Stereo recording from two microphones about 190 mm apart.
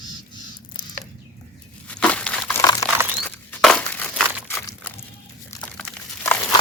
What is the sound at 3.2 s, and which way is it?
Crumpling, 5° left (ahead or behind).